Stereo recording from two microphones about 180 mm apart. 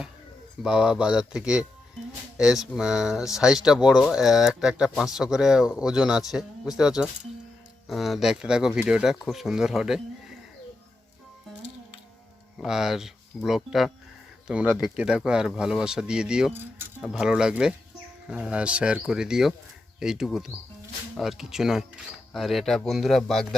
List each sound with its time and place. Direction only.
0.6 s speech: 5° right (ahead or behind)
12.5 s speech: 5° right (ahead or behind)